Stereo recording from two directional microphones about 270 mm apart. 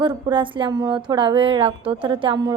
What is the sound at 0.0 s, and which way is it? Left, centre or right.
A woman's voice, centre.